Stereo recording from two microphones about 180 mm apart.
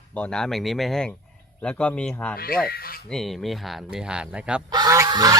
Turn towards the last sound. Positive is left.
turn(degrees=-20)  # may be behind; listen again after turning